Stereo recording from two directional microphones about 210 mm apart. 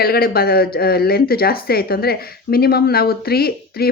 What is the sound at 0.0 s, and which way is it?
A woman's voice, 45° left (ahead or behind).